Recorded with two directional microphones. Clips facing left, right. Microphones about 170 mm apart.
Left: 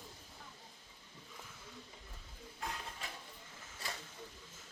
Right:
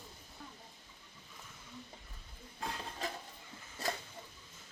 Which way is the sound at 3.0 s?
40° right (ahead or behind).